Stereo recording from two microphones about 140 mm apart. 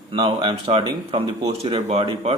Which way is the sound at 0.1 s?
40° right (ahead or behind).